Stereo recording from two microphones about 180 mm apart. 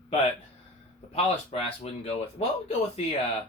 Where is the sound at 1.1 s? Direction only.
35° left (ahead or behind).